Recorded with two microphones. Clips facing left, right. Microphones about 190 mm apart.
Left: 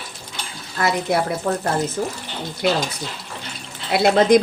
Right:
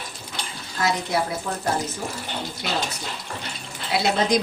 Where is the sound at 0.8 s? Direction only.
60° left (ahead or behind).